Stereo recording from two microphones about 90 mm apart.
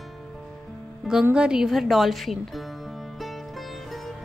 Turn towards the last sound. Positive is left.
turn(degrees=0)  # may be behind; listen again after turning